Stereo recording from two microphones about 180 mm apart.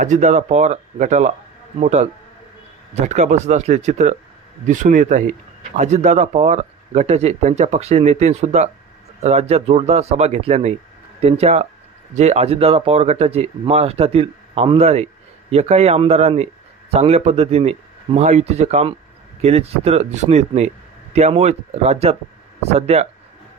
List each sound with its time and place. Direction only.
0.0 s speech: 45° right (ahead or behind)